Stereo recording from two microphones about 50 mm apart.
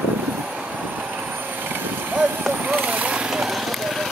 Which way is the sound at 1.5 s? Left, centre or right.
Right.